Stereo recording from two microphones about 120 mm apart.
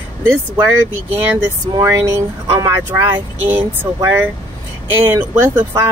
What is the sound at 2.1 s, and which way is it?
Speech, 20° right (ahead or behind).